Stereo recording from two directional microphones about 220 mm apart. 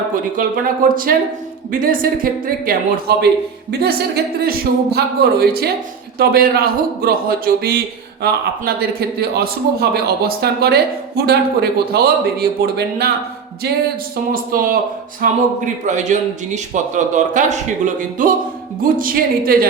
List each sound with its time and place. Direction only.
0.1 s a man's voice: 40° right (ahead or behind)
14.5 s a man's voice: 40° right (ahead or behind)